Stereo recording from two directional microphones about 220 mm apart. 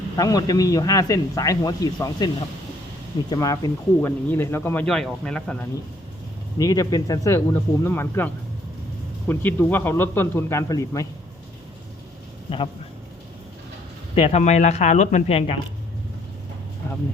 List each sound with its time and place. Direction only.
0.2 s speech: 15° left (ahead or behind)
6.6 s speech: 15° left (ahead or behind)
12.5 s speech: 25° left (ahead or behind)
14.2 s speech: 25° left (ahead or behind)